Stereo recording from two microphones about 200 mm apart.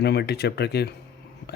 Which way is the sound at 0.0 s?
55° left (ahead or behind).